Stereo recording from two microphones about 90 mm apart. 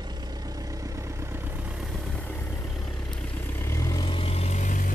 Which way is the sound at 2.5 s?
35° left (ahead or behind).